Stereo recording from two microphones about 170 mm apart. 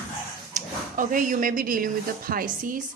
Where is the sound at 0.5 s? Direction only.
50° right (ahead or behind).